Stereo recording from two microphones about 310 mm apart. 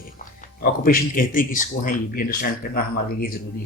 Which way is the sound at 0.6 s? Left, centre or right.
Left.